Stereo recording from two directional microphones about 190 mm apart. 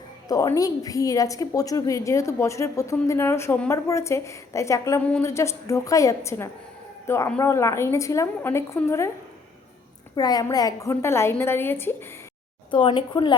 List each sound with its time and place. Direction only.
0.3 s a woman's voice: 20° left (ahead or behind)
10.2 s a woman's voice: 20° left (ahead or behind)
12.7 s speech: 25° left (ahead or behind)